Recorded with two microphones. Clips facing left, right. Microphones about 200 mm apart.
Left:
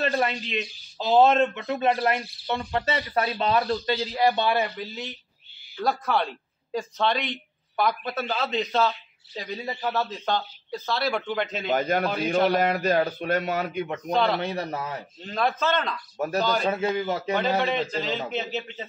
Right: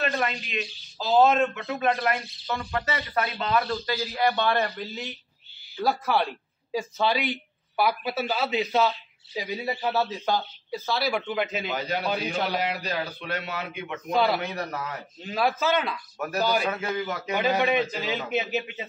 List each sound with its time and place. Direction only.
0.9 s a man's voice: 25° left (ahead or behind)
4.3 s speech: 10° left (ahead or behind); by 11.7 s 5° right (ahead or behind)
11.7 s speech: 50° left (ahead or behind)
12.0 s speech: centre (ahead or behind)
12.4 s speech: 50° left (ahead or behind)
14.1 s speech: 5° right (ahead or behind)
14.4 s a man's voice: 30° left (ahead or behind)
15.2 s a man's voice: 5° right (ahead or behind)
16.6 s a man's voice: 30° left (ahead or behind)
17.6 s a man's voice: 10° right (ahead or behind)